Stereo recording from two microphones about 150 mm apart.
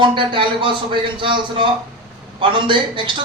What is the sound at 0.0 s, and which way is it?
A man's voice, 35° right (ahead or behind).